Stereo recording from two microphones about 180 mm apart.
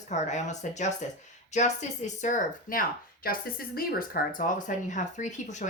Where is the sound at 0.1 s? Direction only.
40° left (ahead or behind).